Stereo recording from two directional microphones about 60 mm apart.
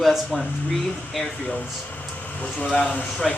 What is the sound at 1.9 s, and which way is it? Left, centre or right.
Vehicle, left.